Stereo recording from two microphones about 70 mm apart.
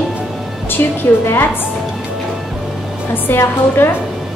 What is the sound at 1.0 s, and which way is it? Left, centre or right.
Speech, left.